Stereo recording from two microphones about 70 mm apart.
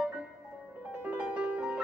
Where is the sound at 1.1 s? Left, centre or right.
Centre.